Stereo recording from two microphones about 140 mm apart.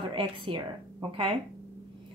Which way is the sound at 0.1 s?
40° right (ahead or behind).